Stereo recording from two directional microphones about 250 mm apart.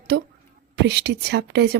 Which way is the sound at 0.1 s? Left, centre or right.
Right.